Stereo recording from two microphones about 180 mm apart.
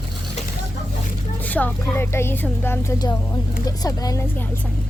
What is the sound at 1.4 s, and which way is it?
Speech, 10° left (ahead or behind).